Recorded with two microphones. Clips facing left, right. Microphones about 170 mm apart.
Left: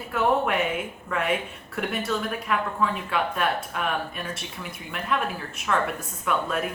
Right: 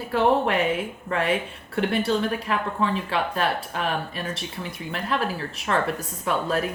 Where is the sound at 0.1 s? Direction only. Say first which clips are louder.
Right 2 dB; 30° right (ahead or behind).